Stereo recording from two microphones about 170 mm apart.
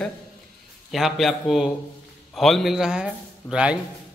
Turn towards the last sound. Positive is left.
turn(degrees=-5)  # may be behind; listen again after turning